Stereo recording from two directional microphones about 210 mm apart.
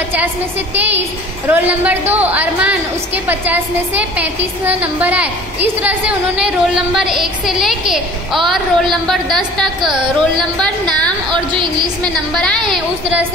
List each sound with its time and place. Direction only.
1.5 s a woman's voice: 10° right (ahead or behind)
11.5 s a woman's voice: 20° right (ahead or behind)
12.0 s a woman's voice: 5° left (ahead or behind)